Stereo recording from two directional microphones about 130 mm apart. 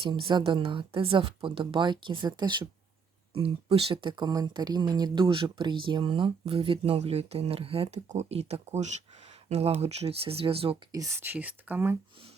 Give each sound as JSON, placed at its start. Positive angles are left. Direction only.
{"t": 0.0, "sound": "speech", "side_deg": -40}
{"t": 3.3, "sound": "speech", "side_deg": -50}
{"t": 10.9, "sound": "speech", "side_deg": -20}